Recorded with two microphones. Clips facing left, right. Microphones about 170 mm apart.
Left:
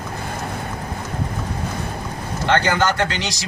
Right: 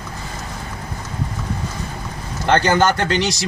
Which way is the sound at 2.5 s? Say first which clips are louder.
Right 3 dB; 40° right (ahead or behind).